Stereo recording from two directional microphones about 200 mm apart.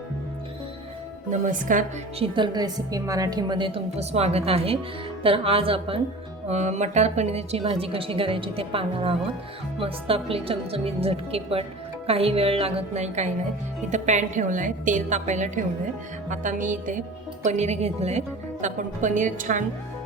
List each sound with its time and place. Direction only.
1.3 s a woman's voice: 40° right (ahead or behind)
2.2 s a woman's voice: 25° right (ahead or behind); by 19.6 s 40° right (ahead or behind)